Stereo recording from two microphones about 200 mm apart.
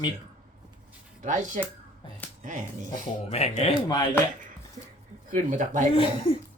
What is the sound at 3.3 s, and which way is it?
Speech, 30° left (ahead or behind).